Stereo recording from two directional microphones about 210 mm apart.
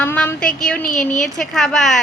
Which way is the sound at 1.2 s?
Centre (ahead or behind).